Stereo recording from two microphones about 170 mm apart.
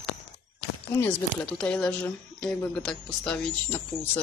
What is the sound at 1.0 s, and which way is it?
Speech, 5° left (ahead or behind).